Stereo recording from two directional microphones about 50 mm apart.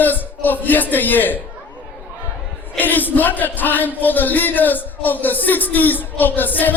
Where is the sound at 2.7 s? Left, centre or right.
Left.